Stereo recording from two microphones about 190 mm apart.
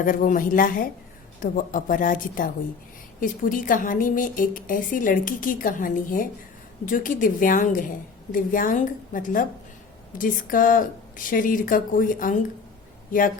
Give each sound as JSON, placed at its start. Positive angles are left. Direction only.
{"t": 0.0, "sound": "a woman's voice", "side_deg": 45}